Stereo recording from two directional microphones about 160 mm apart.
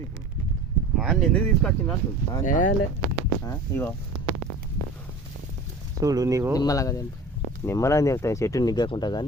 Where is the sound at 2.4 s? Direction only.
55° left (ahead or behind).